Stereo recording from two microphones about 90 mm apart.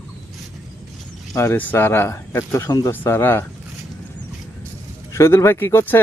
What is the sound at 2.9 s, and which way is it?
Speech, 20° left (ahead or behind).